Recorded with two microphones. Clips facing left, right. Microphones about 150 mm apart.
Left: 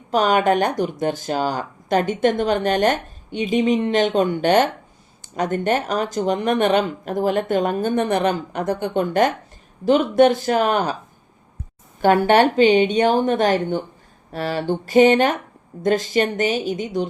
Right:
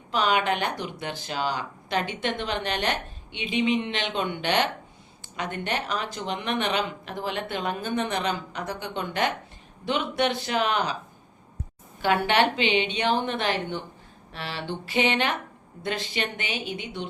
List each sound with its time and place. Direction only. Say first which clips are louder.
0.1 s speech: left 7 dB; 45° left (ahead or behind)
12.0 s a woman's voice: left 8 dB; 45° left (ahead or behind)